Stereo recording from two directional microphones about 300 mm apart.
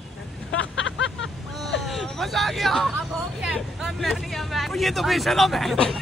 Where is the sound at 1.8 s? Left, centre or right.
Centre.